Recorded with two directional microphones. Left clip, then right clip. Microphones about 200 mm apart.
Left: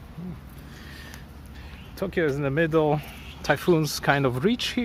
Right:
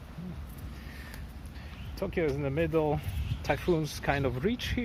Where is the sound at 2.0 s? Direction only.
20° left (ahead or behind).